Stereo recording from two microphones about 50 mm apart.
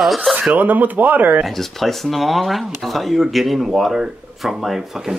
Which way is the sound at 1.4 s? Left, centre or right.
Centre.